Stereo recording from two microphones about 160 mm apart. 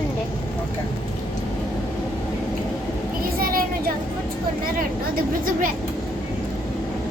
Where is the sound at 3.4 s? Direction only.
65° right (ahead or behind).